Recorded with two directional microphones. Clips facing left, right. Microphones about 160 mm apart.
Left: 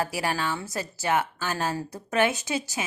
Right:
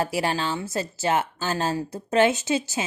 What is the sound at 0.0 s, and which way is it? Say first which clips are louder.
Speech: right 3 dB; 25° right (ahead or behind).